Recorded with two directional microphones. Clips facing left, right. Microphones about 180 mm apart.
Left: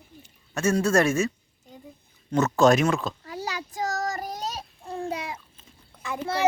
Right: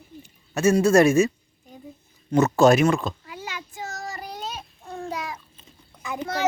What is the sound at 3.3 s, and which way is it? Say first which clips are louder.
Child singing: left 4 dB; 40° left (ahead or behind).